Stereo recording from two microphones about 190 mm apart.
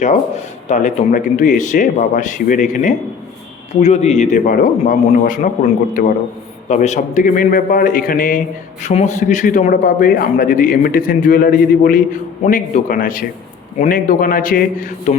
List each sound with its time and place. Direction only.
0.0 s speech: 35° left (ahead or behind)
6.7 s a man's voice: 40° left (ahead or behind)